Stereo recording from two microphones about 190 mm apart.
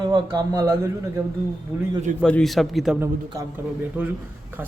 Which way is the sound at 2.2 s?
5° left (ahead or behind).